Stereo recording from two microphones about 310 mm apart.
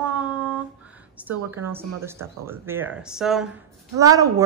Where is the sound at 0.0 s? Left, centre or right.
Centre.